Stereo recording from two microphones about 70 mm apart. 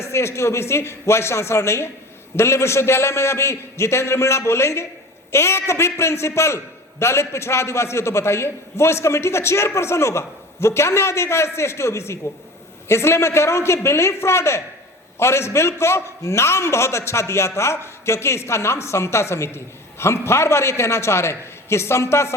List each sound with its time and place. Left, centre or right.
0.0 s a man's voice: left